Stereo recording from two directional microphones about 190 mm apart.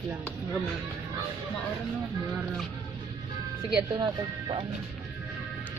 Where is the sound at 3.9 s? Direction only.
20° right (ahead or behind).